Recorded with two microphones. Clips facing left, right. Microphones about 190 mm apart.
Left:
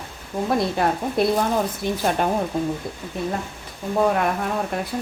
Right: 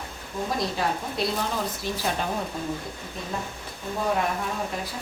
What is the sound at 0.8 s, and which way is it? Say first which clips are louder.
A woman's voice: left 7 dB; 55° left (ahead or behind).